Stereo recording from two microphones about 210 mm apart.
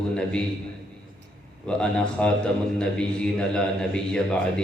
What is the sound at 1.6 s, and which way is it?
A man's voice, 5° left (ahead or behind).